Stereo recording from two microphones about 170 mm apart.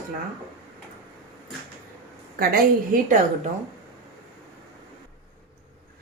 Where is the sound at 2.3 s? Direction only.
60° right (ahead or behind).